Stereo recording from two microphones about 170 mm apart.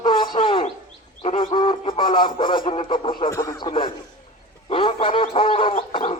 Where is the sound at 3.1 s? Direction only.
25° left (ahead or behind).